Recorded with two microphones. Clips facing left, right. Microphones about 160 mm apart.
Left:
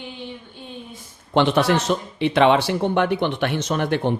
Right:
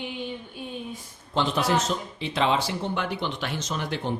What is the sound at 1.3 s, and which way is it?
A man's voice, 70° left (ahead or behind).